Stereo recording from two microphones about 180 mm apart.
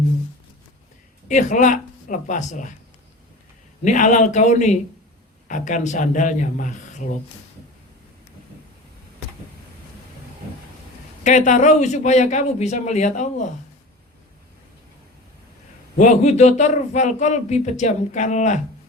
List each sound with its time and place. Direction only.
1.3 s speech: 45° left (ahead or behind)
3.8 s speech: 45° left (ahead or behind)
11.2 s speech: 45° left (ahead or behind)
16.0 s speech: 40° left (ahead or behind)